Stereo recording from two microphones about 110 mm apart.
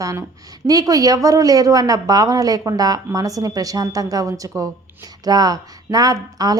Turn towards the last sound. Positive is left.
turn(degrees=-35)  # may be behind; listen again after turning